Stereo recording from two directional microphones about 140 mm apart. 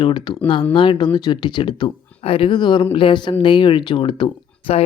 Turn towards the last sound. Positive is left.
turn(degrees=40)  # may be behind; listen again after turning